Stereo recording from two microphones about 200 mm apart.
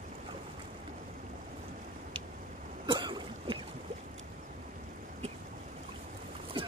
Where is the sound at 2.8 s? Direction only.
25° right (ahead or behind).